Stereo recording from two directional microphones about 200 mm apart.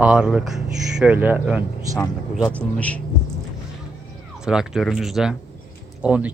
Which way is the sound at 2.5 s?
5° left (ahead or behind).